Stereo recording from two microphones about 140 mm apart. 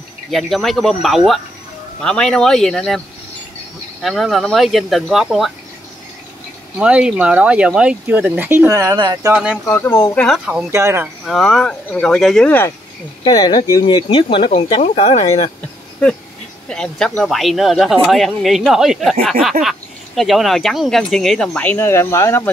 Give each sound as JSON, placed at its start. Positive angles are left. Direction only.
{"t": 0.3, "sound": "speech", "side_deg": 0}
{"t": 4.0, "sound": "speech", "side_deg": 0}
{"t": 6.8, "sound": "speech", "side_deg": -5}
{"t": 9.3, "sound": "speech", "side_deg": -5}
{"t": 9.7, "sound": "speech", "side_deg": 15}
{"t": 10.1, "sound": "speech", "side_deg": 0}
{"t": 10.7, "sound": "speech", "side_deg": -20}
{"t": 11.2, "sound": "speech", "side_deg": 0}
{"t": 13.3, "sound": "speech", "side_deg": 30}
{"t": 16.6, "sound": "speech", "side_deg": 5}